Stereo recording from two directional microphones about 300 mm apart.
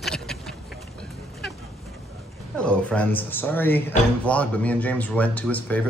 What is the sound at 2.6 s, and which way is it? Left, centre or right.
Speech, centre.